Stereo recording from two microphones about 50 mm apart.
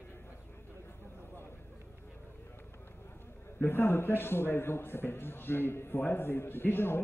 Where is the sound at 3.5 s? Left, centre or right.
Left.